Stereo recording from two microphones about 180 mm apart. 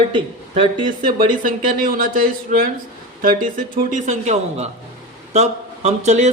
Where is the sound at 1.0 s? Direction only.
50° right (ahead or behind).